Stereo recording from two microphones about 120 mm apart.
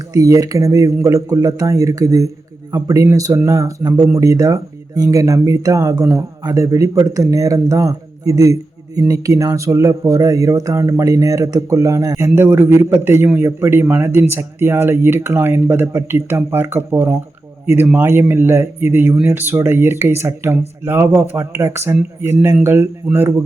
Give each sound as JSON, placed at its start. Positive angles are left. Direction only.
{"t": 0.1, "sound": "speech", "side_deg": -30}